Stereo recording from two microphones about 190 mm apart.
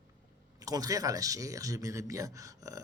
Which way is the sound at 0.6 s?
20° right (ahead or behind).